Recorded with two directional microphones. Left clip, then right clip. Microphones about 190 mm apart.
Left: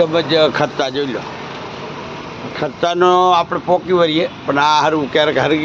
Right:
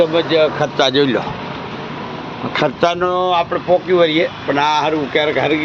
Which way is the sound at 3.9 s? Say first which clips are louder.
Right 1 dB; 20° left (ahead or behind).